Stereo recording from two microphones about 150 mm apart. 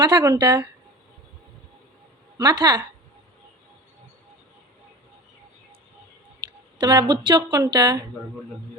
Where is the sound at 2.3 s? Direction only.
25° right (ahead or behind).